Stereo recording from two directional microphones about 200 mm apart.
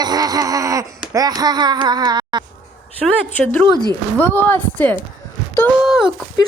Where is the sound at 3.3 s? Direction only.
5° left (ahead or behind).